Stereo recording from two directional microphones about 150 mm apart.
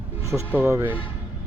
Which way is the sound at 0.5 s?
15° right (ahead or behind).